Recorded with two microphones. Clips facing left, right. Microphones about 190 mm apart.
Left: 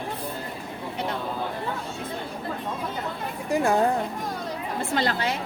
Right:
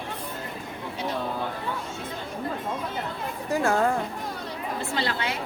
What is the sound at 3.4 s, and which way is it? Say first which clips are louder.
Speech: left 2 dB; 15° left (ahead or behind).